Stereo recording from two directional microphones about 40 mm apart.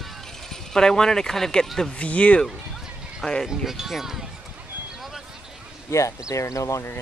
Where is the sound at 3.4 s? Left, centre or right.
Centre.